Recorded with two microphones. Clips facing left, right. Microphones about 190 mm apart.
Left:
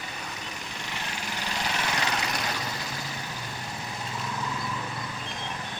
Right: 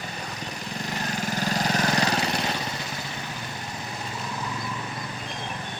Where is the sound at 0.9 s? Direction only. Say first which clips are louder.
Right 8 dB; 40° right (ahead or behind).